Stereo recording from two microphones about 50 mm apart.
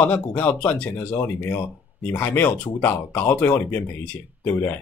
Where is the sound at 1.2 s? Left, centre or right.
Left.